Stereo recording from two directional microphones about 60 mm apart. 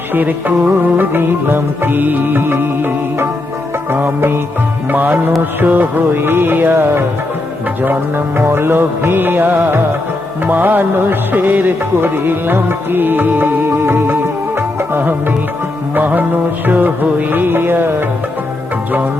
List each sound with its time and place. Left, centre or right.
0.1 s music: right
8.4 s music: right